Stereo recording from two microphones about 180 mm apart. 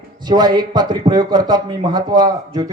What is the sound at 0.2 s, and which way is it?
A man's voice, 25° right (ahead or behind).